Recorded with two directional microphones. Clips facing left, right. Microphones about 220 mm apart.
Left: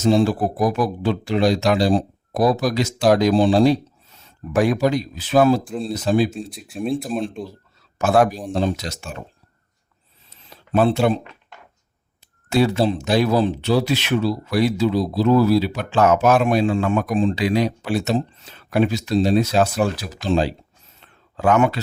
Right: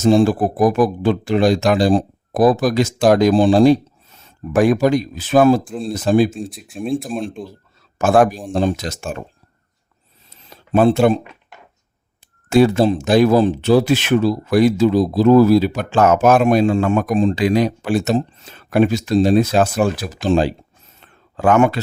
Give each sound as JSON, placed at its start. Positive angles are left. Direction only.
{"t": 0.0, "sound": "speech", "side_deg": -50}
{"t": 6.5, "sound": "speech", "side_deg": 0}
{"t": 7.9, "sound": "speech", "side_deg": -50}
{"t": 10.7, "sound": "speech", "side_deg": -45}
{"t": 12.5, "sound": "speech", "side_deg": -50}
{"t": 21.0, "sound": "a sound", "side_deg": -50}